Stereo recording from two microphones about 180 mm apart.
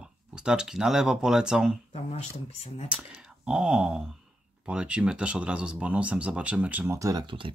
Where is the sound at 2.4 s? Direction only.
40° left (ahead or behind).